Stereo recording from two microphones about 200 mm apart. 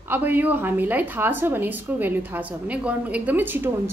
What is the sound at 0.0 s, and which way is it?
A woman's voice, 10° right (ahead or behind).